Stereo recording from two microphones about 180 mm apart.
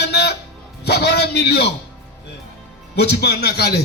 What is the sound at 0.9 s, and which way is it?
Speech, 65° left (ahead or behind).